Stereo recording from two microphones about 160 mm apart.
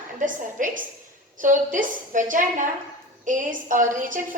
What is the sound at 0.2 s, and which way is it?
A woman's voice, 55° right (ahead or behind).